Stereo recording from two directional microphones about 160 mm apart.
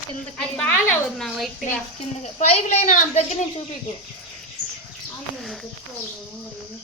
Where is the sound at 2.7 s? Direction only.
50° left (ahead or behind).